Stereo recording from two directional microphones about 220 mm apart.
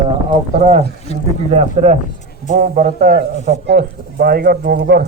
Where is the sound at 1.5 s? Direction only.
30° right (ahead or behind).